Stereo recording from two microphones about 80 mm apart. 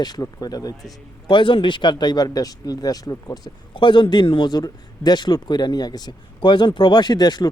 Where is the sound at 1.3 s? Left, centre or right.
Left.